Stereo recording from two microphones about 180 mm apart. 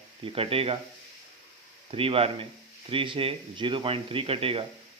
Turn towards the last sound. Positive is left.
turn(degrees=-30)  # may be behind; listen again after turning